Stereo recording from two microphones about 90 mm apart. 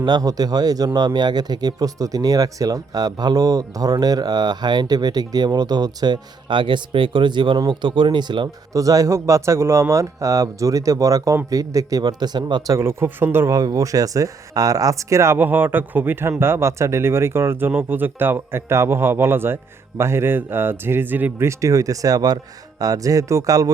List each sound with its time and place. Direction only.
0.0 s speech: 45° right (ahead or behind)
8.7 s speech: 40° right (ahead or behind); by 12.6 s 55° right (ahead or behind)
12.6 s speech: 30° right (ahead or behind)
13.5 s speech: 40° right (ahead or behind)